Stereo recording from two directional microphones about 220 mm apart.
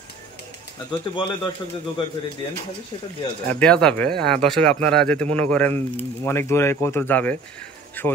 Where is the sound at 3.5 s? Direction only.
5° left (ahead or behind).